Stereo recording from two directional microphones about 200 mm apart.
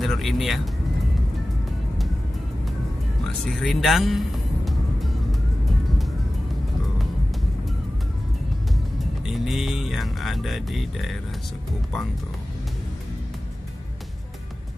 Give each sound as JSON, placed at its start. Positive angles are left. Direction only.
{"t": 0.0, "sound": "speech", "side_deg": 0}
{"t": 3.4, "sound": "speech", "side_deg": 0}
{"t": 9.2, "sound": "speech", "side_deg": 0}